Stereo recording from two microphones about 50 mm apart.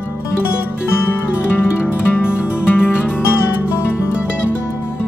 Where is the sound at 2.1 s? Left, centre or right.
Left.